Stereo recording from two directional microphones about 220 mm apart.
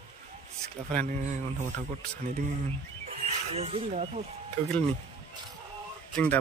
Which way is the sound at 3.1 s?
30° right (ahead or behind).